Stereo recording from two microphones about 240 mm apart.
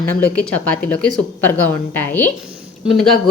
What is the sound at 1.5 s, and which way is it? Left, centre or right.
Speech, centre.